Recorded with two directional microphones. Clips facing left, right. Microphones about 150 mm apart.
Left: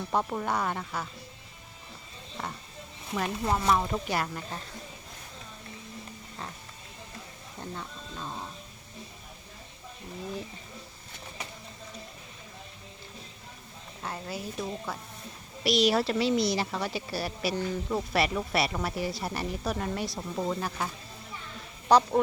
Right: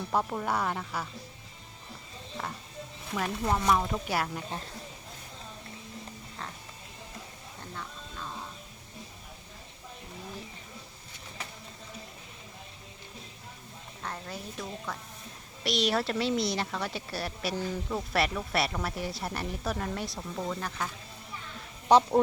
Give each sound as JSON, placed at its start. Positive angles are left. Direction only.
{"t": 0.1, "sound": "a woman's voice", "side_deg": 0}
{"t": 2.4, "sound": "a woman's voice", "side_deg": 0}
{"t": 7.8, "sound": "music", "side_deg": 25}
{"t": 14.0, "sound": "a woman's voice", "side_deg": 10}
{"t": 21.8, "sound": "speech", "side_deg": -20}